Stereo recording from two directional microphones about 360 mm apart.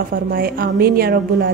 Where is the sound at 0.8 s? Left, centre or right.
Right.